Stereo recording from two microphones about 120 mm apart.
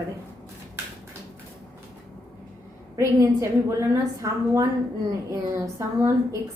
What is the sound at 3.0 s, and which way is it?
A woman's voice, 20° right (ahead or behind).